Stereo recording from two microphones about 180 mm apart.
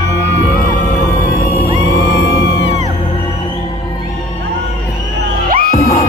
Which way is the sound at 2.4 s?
75° left (ahead or behind).